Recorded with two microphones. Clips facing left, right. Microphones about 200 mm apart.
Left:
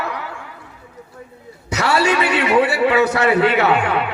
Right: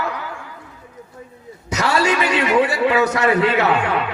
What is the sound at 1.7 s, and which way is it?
A man's voice, 30° left (ahead or behind).